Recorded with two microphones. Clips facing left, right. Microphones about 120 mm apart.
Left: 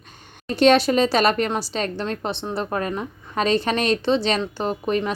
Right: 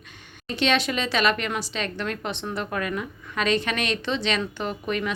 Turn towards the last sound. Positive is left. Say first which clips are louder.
# left 5 dB
turn(degrees=35)  # may be behind; listen again after turning